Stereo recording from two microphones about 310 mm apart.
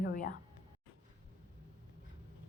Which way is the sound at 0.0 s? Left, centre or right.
Left.